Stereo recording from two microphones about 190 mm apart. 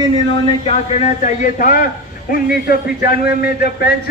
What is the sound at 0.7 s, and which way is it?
A man's voice, 40° left (ahead or behind).